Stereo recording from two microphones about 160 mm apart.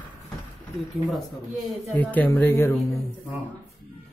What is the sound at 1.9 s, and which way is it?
Speech, 10° left (ahead or behind).